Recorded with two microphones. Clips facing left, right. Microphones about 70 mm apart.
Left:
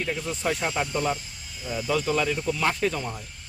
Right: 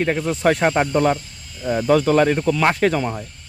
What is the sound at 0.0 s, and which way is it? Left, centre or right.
Speech, right.